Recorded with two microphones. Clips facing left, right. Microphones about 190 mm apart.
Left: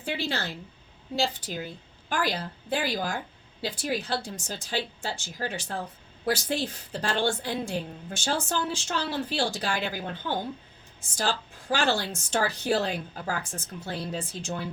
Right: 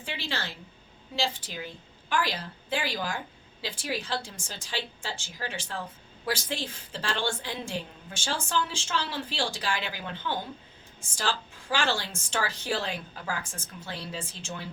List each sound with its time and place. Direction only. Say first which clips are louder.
0.0 s a woman's voice: left 5 dB; 45° left (ahead or behind)